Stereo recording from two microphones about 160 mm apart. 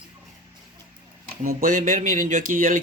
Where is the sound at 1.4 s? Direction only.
60° right (ahead or behind).